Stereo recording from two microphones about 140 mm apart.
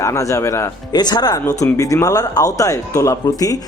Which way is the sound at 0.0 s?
20° left (ahead or behind).